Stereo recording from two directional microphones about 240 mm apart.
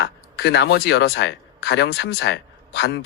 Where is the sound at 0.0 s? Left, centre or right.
Left.